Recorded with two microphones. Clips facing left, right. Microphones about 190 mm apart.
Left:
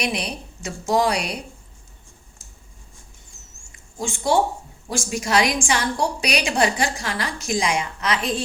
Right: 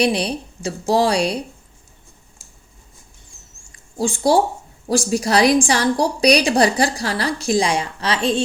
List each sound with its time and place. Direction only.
0.0 s a woman's voice: 30° right (ahead or behind)
3.7 s a sound: 35° right (ahead or behind)
4.9 s a woman's voice: 35° right (ahead or behind)